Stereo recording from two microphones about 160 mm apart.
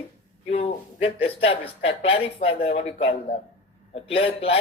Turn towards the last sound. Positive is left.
turn(degrees=35)  # may be behind; listen again after turning